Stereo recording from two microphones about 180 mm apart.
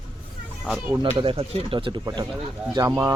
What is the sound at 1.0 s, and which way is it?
Speech, 30° right (ahead or behind).